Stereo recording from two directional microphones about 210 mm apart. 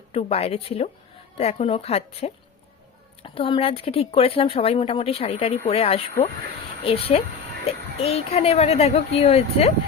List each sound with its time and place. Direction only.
0.1 s a woman's voice: 30° left (ahead or behind)